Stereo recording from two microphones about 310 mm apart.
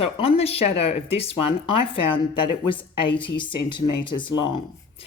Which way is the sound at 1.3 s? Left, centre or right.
Left.